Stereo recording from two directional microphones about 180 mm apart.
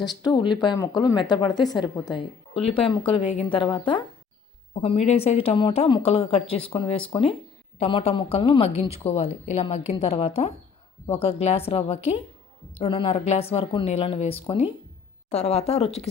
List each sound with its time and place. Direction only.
0.0 s speech: 25° left (ahead or behind)
4.7 s speech: 40° left (ahead or behind)